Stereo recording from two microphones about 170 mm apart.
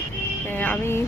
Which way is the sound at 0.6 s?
15° left (ahead or behind).